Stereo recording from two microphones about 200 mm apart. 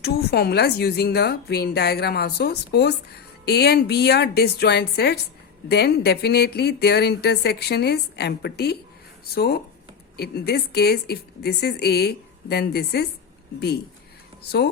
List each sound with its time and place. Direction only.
0.0 s speech: 55° left (ahead or behind)